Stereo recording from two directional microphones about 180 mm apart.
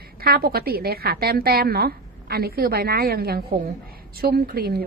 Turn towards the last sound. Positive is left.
turn(degrees=-60)  # may be behind; listen again after turning